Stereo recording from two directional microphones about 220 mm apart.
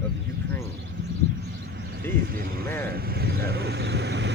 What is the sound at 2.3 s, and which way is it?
Speech, 40° right (ahead or behind).